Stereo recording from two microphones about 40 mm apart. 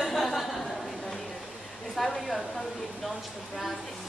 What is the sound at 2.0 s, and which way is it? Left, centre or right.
A woman's voice, centre.